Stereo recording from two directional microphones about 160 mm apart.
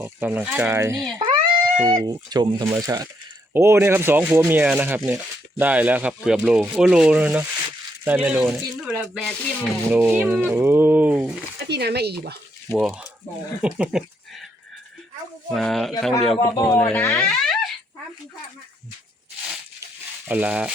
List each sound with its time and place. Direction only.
0.0 s speech: 10° right (ahead or behind)
1.2 s speech: 30° right (ahead or behind); by 11.3 s 5° right (ahead or behind)
11.7 s speech: 90° right
12.7 s speech: 5° right (ahead or behind)
15.5 s speech: centre (ahead or behind)
16.4 s speech: 20° left (ahead or behind)
16.7 s speech: 10° left (ahead or behind)
20.2 s speech: 10° right (ahead or behind)